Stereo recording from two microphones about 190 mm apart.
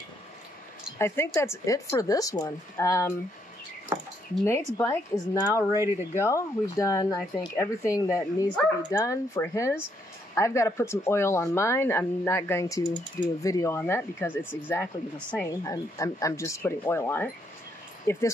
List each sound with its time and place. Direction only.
0.9 s speech: 15° left (ahead or behind)
4.7 s speech: 10° left (ahead or behind)
5.8 s speech: 15° right (ahead or behind)
6.1 s speech: 15° left (ahead or behind)